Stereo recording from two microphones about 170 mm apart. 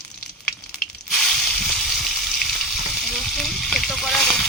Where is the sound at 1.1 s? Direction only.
5° left (ahead or behind).